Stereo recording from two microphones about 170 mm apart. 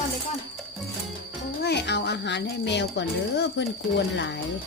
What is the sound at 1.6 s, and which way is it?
A woman's voice, 85° left.